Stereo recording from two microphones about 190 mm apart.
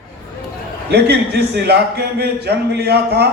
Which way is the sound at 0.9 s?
60° right (ahead or behind).